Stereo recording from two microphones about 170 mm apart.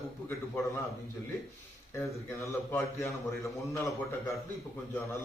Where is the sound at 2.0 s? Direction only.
15° left (ahead or behind).